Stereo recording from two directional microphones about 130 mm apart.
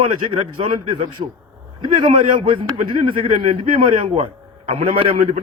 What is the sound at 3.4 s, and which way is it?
A man's voice, 45° right (ahead or behind).